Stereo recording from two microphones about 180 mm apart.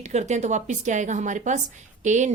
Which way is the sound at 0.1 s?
40° right (ahead or behind).